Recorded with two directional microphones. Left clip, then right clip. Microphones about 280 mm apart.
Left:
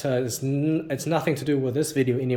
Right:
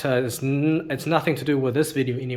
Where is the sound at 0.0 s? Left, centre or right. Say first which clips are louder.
Right 3 dB; centre.